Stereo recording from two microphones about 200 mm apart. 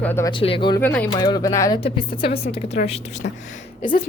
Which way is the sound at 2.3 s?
30° left (ahead or behind).